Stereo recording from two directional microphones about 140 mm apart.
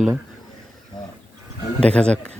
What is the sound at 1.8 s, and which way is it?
Speech, 5° left (ahead or behind).